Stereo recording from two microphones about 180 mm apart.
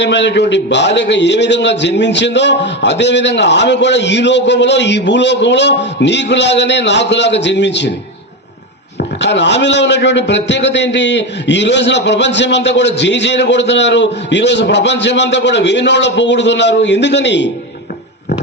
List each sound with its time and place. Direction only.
0.0 s a man's voice: 75° left (ahead or behind)
9.0 s a man's voice: 75° left (ahead or behind)